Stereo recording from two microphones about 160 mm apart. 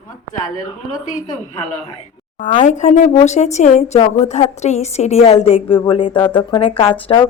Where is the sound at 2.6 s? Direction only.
50° left (ahead or behind).